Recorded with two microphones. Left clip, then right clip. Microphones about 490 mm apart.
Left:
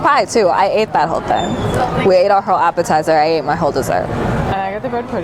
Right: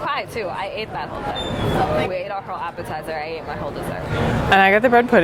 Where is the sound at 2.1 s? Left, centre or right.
Left.